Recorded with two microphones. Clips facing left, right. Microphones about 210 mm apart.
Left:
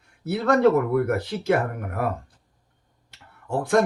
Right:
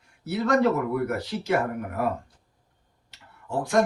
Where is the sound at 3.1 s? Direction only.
55° left (ahead or behind).